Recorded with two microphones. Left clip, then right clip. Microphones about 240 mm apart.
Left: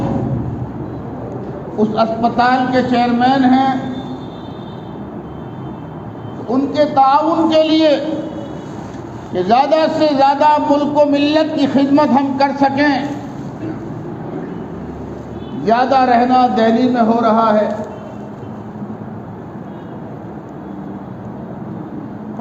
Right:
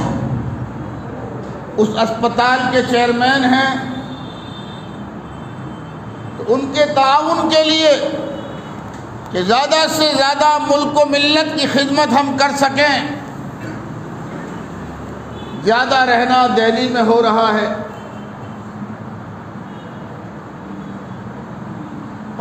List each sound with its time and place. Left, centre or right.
1.8 s a man's voice: right
6.5 s a man's voice: right
9.3 s a man's voice: right
15.6 s a man's voice: right